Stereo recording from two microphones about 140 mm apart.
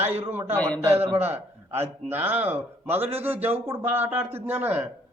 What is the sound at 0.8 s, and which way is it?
A man's voice, 15° right (ahead or behind).